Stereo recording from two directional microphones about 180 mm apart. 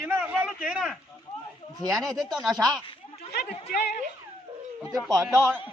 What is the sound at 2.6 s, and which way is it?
Speech, 20° right (ahead or behind).